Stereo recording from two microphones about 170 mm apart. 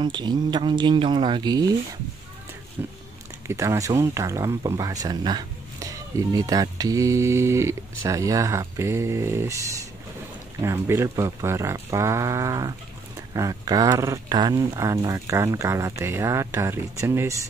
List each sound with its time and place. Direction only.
0.0 s speech: 25° right (ahead or behind)
2.8 s speech: 15° right (ahead or behind)